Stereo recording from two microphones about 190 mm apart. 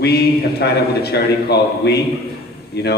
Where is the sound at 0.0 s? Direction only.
55° left (ahead or behind).